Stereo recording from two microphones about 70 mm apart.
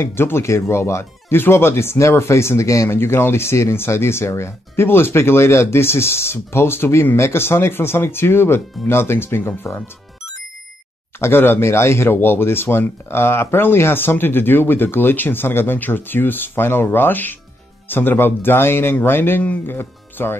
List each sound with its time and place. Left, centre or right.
0.0 s speech: left
3.0 s speech: left
11.1 s speech: left